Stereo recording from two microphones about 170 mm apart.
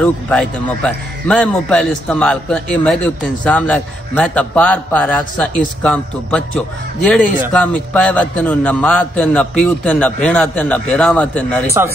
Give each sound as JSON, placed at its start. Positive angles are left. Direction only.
{"t": 0.0, "sound": "a man's voice", "side_deg": 5}